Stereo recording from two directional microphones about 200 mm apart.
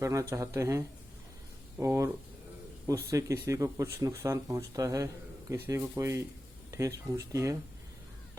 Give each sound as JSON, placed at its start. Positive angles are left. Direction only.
{"t": 0.0, "sound": "speech", "side_deg": -15}